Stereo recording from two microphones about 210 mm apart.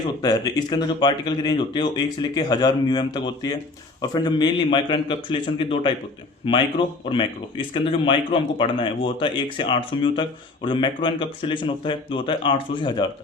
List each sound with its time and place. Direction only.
0.2 s speech: 20° left (ahead or behind)